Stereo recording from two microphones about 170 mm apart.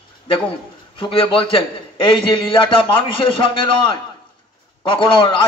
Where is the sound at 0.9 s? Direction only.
30° left (ahead or behind).